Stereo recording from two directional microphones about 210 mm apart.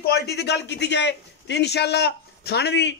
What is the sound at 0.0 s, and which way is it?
A man's voice, 50° left (ahead or behind).